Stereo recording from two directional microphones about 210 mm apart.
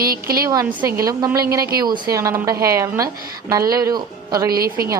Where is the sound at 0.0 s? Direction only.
45° right (ahead or behind).